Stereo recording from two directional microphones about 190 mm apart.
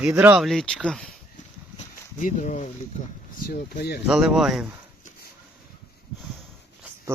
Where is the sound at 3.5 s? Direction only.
55° left (ahead or behind).